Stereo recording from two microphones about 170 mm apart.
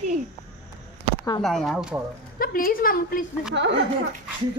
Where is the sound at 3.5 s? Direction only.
90° right.